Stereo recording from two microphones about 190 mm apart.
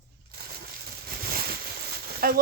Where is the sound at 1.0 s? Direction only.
55° right (ahead or behind).